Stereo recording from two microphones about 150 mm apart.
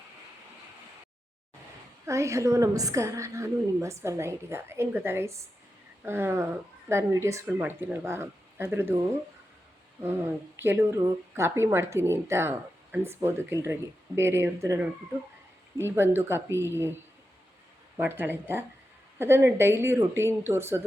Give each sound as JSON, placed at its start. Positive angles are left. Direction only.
{"t": 2.0, "sound": "a woman's voice", "side_deg": -20}
{"t": 10.0, "sound": "speech", "side_deg": -15}
{"t": 15.8, "sound": "speech", "side_deg": -15}
{"t": 18.0, "sound": "speech", "side_deg": -15}